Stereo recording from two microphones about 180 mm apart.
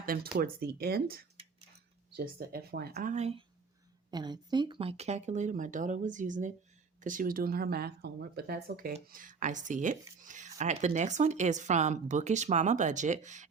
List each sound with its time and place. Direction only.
0.0 s speech: 55° right (ahead or behind); by 3.4 s 35° right (ahead or behind)
4.1 s speech: 25° right (ahead or behind); by 13.5 s 40° right (ahead or behind)